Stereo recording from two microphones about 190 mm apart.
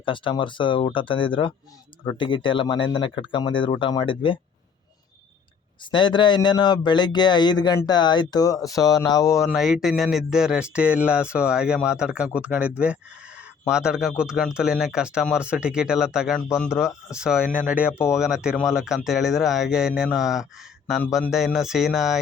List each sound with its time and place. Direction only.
0.0 s speech: 25° left (ahead or behind)
5.8 s speech: 25° left (ahead or behind)
9.4 s speech: centre (ahead or behind)
17.9 s speech: 15° left (ahead or behind)
18.2 s speech: 5° right (ahead or behind)